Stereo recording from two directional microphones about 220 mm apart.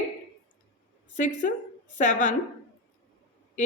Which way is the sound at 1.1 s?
35° left (ahead or behind).